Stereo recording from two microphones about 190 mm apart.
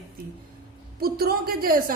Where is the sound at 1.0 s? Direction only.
50° right (ahead or behind).